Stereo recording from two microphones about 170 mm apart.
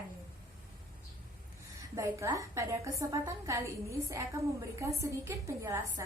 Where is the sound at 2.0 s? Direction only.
20° right (ahead or behind).